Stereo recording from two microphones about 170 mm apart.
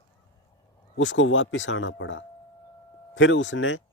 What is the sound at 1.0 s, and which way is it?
A man's voice, 90° left.